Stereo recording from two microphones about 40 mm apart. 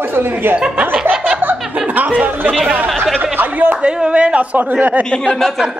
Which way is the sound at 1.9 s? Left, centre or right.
Right.